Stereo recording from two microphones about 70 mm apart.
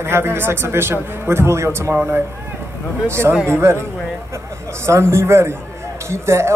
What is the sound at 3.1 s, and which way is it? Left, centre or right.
Speech, right.